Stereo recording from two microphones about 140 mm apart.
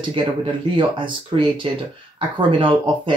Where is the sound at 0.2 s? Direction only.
40° right (ahead or behind).